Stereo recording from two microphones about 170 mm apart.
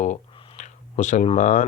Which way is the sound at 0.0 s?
40° left (ahead or behind).